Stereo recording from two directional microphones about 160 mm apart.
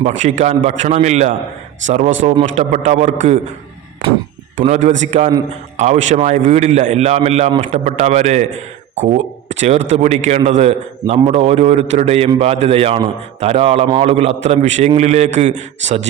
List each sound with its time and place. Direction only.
0.0 s a man's voice: 50° right (ahead or behind)
4.7 s a man's voice: 50° right (ahead or behind)